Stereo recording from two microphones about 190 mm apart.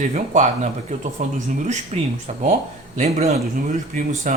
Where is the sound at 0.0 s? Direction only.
40° right (ahead or behind).